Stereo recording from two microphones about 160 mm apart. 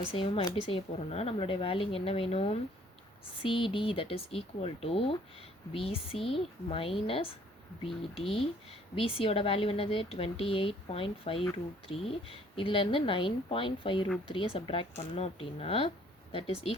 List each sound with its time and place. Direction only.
0.0 s speech: 35° left (ahead or behind)